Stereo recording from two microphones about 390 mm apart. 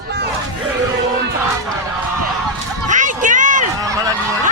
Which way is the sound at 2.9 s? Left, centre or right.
Centre.